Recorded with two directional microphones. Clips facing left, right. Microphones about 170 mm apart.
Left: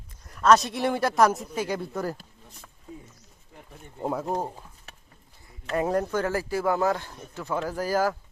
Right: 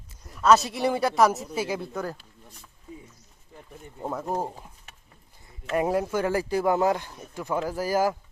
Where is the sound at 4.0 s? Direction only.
10° left (ahead or behind).